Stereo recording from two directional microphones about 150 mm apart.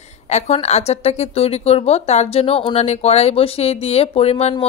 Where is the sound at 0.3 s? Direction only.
45° left (ahead or behind).